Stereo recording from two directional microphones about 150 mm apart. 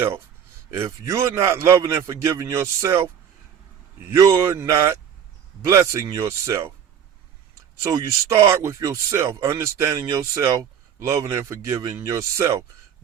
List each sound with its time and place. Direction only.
0.8 s speech: 20° right (ahead or behind)
4.1 s speech: 20° right (ahead or behind)
7.8 s speech: 20° right (ahead or behind)